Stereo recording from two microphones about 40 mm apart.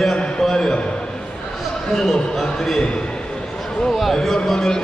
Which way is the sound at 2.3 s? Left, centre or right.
Centre.